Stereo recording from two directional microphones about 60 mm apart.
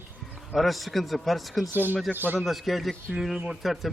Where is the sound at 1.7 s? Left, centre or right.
Right.